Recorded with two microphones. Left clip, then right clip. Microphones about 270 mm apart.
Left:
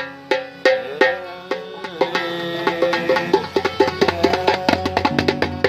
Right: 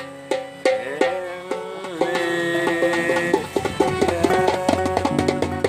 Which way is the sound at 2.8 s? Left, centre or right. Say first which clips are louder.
Left 2 dB; left.